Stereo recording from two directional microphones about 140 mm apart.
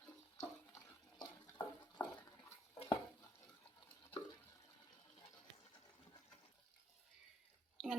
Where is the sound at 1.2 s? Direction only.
30° left (ahead or behind).